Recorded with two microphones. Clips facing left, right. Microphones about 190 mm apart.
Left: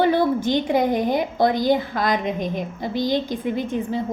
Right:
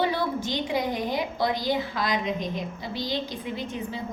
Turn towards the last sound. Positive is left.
turn(degrees=50)  # may be behind; listen again after turning